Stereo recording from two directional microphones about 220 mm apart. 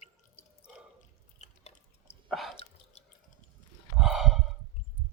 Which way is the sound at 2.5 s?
25° left (ahead or behind).